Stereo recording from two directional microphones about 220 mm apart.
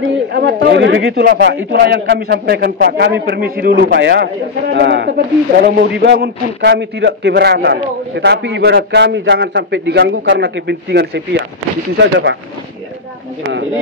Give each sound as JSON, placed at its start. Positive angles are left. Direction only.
{"t": 0.3, "sound": "a man's voice", "side_deg": -50}